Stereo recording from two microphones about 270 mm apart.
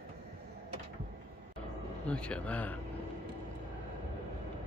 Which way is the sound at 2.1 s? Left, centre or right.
Centre.